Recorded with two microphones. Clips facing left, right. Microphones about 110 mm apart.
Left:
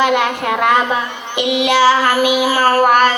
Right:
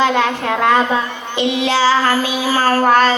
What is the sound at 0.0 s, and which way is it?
Child singing, 15° left (ahead or behind).